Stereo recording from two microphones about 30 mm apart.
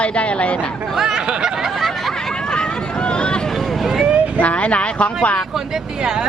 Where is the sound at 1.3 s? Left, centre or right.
Right.